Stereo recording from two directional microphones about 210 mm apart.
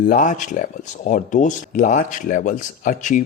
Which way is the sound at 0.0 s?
40° left (ahead or behind).